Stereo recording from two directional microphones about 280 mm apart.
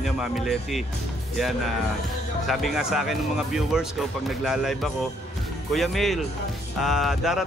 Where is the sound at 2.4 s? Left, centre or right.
Centre.